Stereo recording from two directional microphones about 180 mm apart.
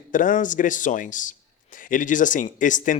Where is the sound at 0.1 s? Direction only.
45° left (ahead or behind).